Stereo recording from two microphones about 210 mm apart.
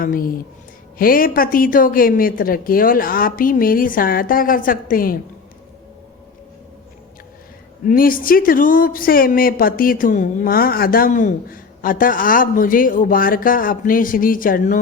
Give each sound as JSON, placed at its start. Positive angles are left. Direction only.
{"t": 0.0, "sound": "a woman's voice", "side_deg": 45}
{"t": 7.9, "sound": "speech", "side_deg": 45}